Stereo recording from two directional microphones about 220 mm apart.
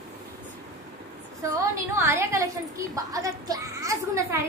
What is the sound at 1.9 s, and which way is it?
A woman's voice, 10° right (ahead or behind).